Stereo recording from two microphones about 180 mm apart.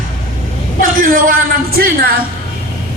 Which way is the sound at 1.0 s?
50° right (ahead or behind).